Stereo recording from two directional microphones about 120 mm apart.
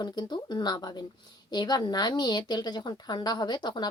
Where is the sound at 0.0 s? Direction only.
35° left (ahead or behind).